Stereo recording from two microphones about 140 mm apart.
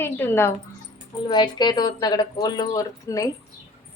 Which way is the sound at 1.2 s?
30° left (ahead or behind).